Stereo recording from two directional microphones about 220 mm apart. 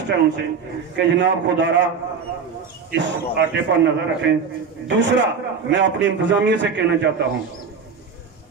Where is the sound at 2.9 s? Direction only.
50° right (ahead or behind).